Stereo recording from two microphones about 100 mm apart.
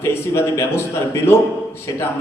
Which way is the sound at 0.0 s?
25° left (ahead or behind).